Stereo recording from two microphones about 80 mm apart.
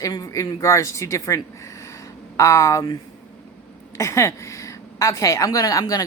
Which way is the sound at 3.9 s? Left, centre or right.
Left.